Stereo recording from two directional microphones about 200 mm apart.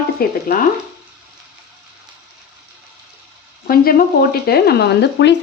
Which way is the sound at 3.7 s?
45° left (ahead or behind).